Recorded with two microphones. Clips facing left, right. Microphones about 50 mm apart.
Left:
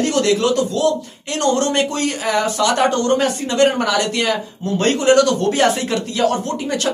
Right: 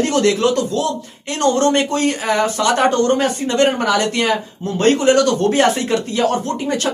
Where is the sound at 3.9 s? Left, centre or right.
Centre.